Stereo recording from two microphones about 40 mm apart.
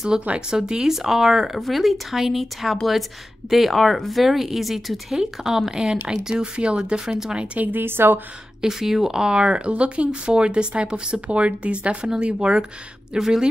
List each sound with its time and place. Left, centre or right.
0.1 s speech: centre
7.1 s speech: centre
7.7 s a woman's voice: right
8.5 s speech: centre